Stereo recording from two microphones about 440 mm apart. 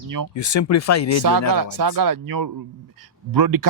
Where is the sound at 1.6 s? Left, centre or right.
Right.